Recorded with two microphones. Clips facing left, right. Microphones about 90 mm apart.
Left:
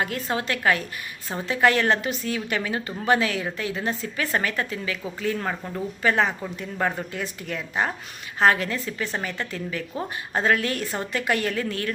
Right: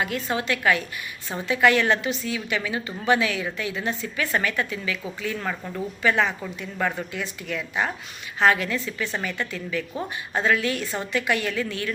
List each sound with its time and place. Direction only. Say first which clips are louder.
0.3 s a woman's voice: even; 40° left (ahead or behind)